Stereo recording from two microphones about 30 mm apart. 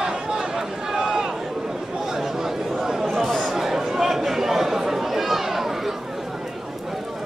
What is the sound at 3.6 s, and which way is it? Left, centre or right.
Chatter, centre.